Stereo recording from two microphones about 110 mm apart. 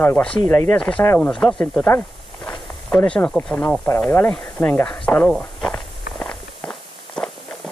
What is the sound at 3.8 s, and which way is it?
Speech, 20° left (ahead or behind).